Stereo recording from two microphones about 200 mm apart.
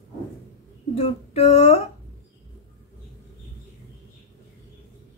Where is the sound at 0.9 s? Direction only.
30° left (ahead or behind).